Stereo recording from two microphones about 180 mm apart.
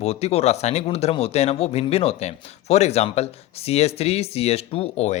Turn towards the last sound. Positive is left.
turn(degrees=35)  # may be behind; listen again after turning